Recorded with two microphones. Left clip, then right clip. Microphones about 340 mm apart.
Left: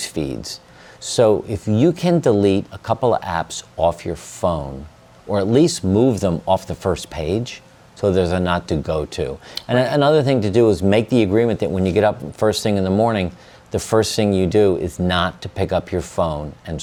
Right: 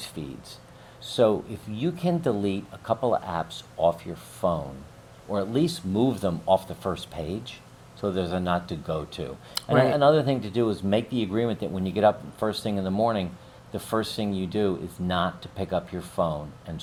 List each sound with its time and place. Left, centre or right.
0.2 s speech: left
9.6 s speech: left